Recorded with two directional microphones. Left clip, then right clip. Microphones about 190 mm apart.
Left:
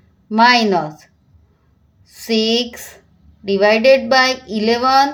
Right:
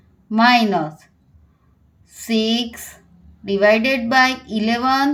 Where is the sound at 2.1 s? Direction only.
20° left (ahead or behind).